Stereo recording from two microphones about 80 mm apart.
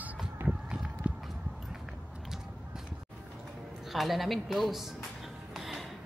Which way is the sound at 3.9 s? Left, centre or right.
Centre.